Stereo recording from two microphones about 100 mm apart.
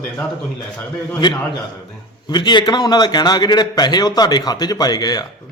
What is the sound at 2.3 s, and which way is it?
A man's voice, 50° left (ahead or behind).